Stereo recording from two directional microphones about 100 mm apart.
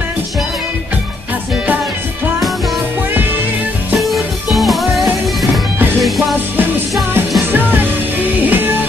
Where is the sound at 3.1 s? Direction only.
20° right (ahead or behind).